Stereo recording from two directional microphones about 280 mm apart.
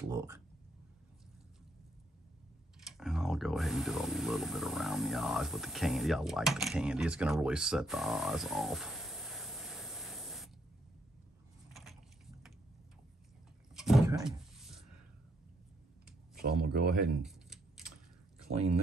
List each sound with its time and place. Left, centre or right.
0.1 s speech: centre
2.8 s speech: centre
11.7 s vehicle: centre
13.7 s a sound: centre
16.3 s speech: right
17.2 s tick-tock: centre